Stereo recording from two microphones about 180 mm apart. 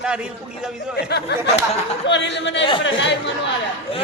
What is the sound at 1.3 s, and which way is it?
Speech, 70° left (ahead or behind).